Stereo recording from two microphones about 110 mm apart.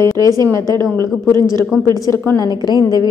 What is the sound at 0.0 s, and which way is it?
Speech, 40° right (ahead or behind).